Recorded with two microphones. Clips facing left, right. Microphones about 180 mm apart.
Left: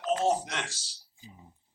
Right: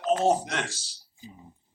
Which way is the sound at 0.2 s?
50° right (ahead or behind).